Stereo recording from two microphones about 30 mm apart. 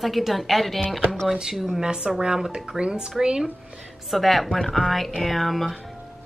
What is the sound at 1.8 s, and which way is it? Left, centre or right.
Speech, right.